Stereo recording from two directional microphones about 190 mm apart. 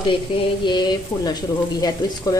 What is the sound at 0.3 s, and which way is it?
Speech, 30° left (ahead or behind).